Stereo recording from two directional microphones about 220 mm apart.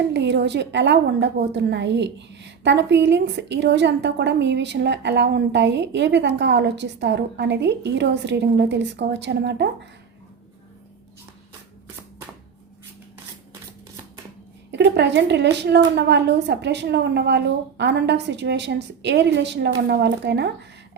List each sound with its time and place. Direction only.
0.1 s a woman's voice: 50° right (ahead or behind)
14.7 s a woman's voice: 50° right (ahead or behind)